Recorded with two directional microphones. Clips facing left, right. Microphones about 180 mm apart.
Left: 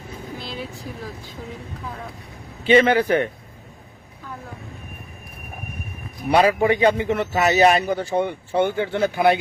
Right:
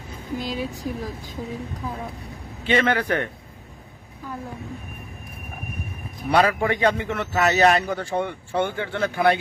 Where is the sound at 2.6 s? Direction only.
25° left (ahead or behind).